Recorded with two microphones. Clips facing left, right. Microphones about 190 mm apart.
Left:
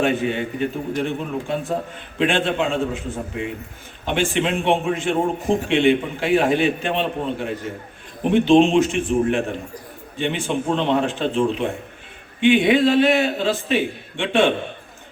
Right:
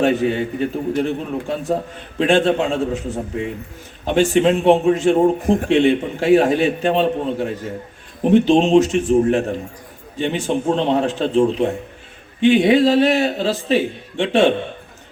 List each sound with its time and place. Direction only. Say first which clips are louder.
0.0 s a man's voice: right 4 dB; 40° right (ahead or behind)
4.0 s a man's voice: right 6 dB; 40° right (ahead or behind)